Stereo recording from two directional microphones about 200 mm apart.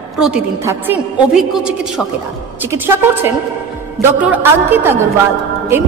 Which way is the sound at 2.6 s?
10° right (ahead or behind).